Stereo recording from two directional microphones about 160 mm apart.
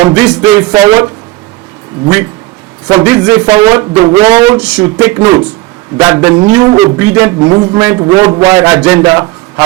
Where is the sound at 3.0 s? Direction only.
10° right (ahead or behind).